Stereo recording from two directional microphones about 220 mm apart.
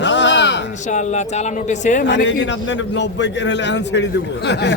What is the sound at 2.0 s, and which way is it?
A man's voice, 55° left (ahead or behind).